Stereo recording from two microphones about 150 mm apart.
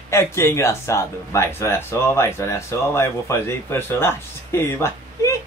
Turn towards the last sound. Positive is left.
turn(degrees=20)  # may be behind; listen again after turning